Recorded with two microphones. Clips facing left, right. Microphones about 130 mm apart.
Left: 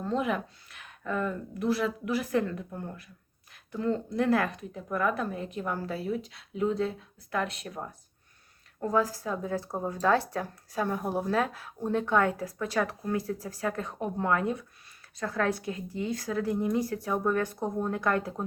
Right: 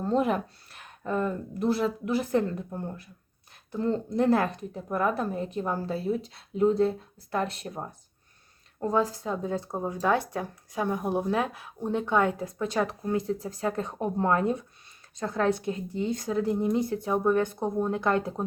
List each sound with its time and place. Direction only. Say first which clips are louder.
0.0 s a woman's voice: right 4 dB; 40° right (ahead or behind); by 18.4 s 25° right (ahead or behind)